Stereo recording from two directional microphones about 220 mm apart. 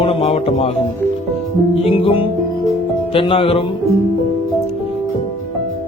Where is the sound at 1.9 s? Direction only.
25° left (ahead or behind).